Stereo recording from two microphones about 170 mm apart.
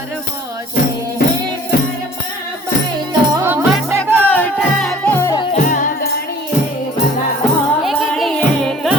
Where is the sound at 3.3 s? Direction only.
15° right (ahead or behind).